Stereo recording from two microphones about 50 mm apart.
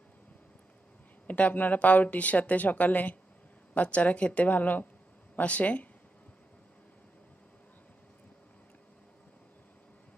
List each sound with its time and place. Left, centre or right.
1.2 s a woman's voice: left